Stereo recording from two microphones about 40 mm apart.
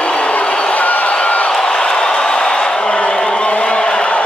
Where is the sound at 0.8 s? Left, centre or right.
Left.